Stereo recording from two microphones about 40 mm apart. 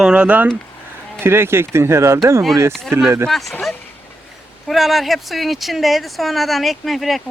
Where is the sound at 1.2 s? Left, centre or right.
Right.